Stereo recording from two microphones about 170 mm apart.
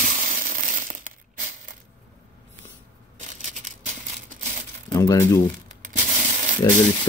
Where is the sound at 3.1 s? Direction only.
45° right (ahead or behind).